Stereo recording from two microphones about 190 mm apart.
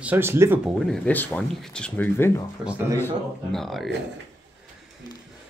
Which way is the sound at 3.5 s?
Centre (ahead or behind).